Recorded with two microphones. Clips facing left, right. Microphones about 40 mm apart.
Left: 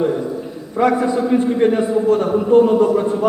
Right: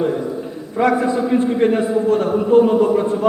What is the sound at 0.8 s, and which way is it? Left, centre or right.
A man's voice, centre.